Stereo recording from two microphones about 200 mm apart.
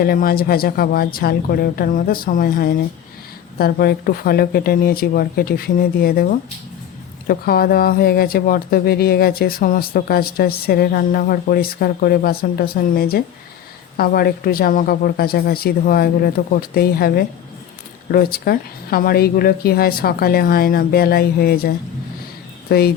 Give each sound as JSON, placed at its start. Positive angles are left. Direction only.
{"t": 0.0, "sound": "speech", "side_deg": 45}
{"t": 7.3, "sound": "speech", "side_deg": 50}